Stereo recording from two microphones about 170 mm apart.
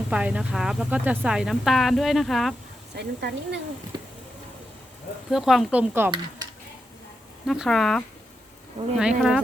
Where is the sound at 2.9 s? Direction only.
80° right.